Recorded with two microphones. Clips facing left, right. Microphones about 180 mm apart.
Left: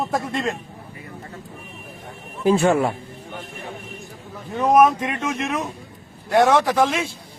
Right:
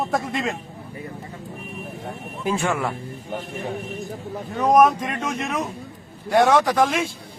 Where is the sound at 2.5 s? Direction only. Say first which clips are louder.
Left 7 dB; 35° left (ahead or behind).